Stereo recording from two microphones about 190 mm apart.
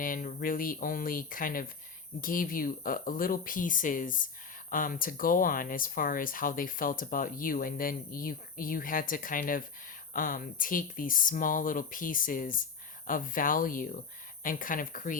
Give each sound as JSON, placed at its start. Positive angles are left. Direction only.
{"t": 0.0, "sound": "speech", "side_deg": 45}